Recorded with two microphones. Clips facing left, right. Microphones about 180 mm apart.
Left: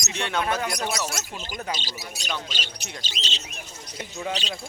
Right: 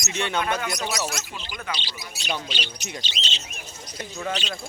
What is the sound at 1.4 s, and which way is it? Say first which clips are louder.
Speech: left 2 dB; 45° left (ahead or behind).